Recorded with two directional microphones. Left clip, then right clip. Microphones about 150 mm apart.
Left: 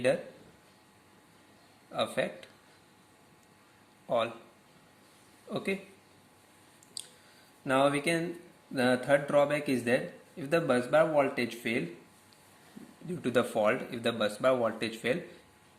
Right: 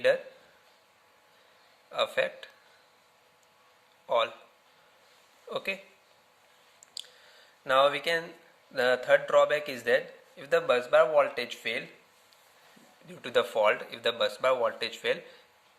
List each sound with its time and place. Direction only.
1.9 s a man's voice: 40° right (ahead or behind)
5.5 s speech: 40° right (ahead or behind)
7.6 s a man's voice: 40° right (ahead or behind)
13.1 s a man's voice: 35° right (ahead or behind)